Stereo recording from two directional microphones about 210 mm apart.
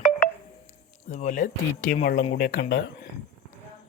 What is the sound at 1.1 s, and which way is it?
Speech, 35° left (ahead or behind).